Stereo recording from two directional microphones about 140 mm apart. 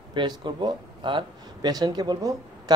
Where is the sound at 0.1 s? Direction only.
35° right (ahead or behind).